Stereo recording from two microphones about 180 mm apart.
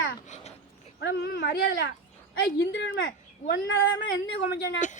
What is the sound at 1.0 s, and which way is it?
Speech, 65° left (ahead or behind).